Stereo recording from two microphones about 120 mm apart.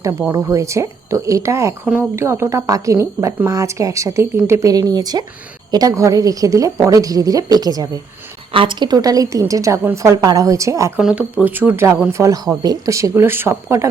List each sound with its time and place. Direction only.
0.0 s a woman's voice: 25° right (ahead or behind)
8.5 s speech: 40° right (ahead or behind); by 10.9 s 25° right (ahead or behind)
11.3 s speech: 15° right (ahead or behind)